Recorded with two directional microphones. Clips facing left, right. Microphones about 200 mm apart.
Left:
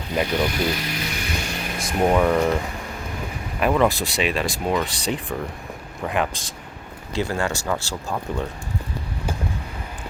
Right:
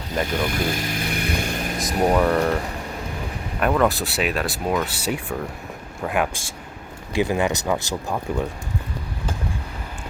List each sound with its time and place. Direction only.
0.4 s a sound: 50° right (ahead or behind)
2.0 s speech: centre (ahead or behind)
3.6 s speech: centre (ahead or behind)